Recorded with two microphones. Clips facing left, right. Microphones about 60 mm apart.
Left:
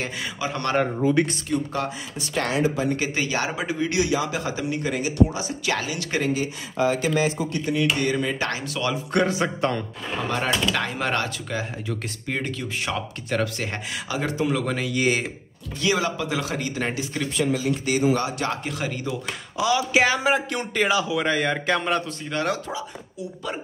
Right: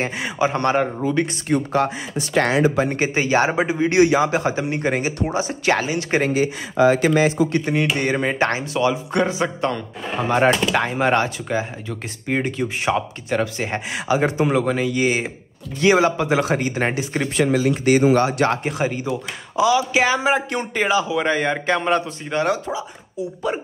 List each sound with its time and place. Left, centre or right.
0.0 s speech: right
1.0 s speech: centre
1.7 s speech: right
2.7 s speech: right
3.0 s speech: right
4.0 s speech: right
6.3 s speech: right
7.5 s speech: right
9.1 s speech: centre
10.1 s a man's voice: right; by 15.2 s centre
15.8 s speech: right
17.4 s speech: right
18.6 s speech: right
19.5 s a man's voice: centre